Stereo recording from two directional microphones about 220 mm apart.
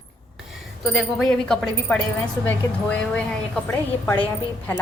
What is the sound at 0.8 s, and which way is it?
A woman's voice, centre (ahead or behind).